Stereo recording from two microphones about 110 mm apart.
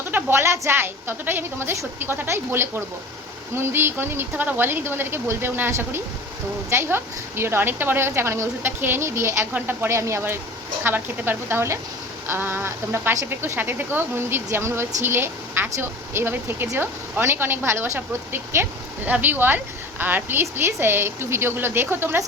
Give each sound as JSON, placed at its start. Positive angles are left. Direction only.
{"t": 0.1, "sound": "a woman's voice", "side_deg": -20}